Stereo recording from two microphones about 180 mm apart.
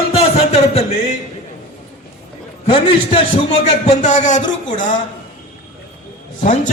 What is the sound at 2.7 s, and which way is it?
A man's voice, 30° left (ahead or behind).